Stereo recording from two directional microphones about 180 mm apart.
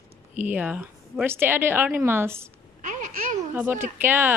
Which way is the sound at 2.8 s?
45° right (ahead or behind).